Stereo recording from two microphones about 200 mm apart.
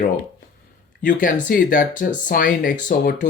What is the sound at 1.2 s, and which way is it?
Speech, 45° left (ahead or behind).